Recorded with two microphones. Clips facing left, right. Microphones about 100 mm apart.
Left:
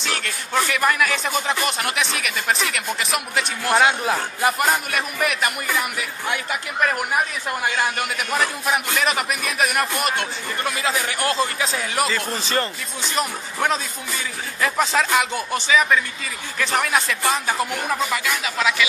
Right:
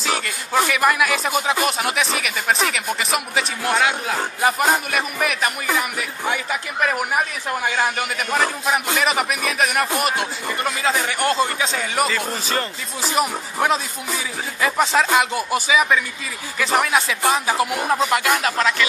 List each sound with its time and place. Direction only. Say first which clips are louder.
0.0 s speech: right 3 dB; 5° right (ahead or behind)
4.9 s speech: right 1 dB; centre (ahead or behind)
18.1 s speech: right 5 dB; 60° right (ahead or behind)
18.6 s speech: right 1 dB; 10° left (ahead or behind)